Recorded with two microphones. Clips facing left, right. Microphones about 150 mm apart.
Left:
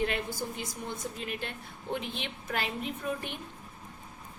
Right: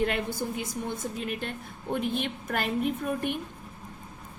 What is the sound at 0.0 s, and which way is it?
A woman's voice, 55° right (ahead or behind).